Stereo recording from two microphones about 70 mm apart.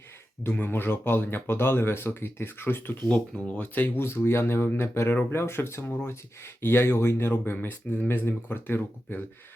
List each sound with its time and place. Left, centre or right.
0.4 s speech: left
3.1 s speech: centre